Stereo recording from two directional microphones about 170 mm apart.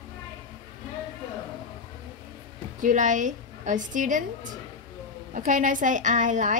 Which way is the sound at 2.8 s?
50° right (ahead or behind).